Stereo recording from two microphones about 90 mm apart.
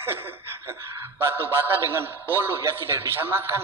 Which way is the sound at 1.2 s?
25° right (ahead or behind).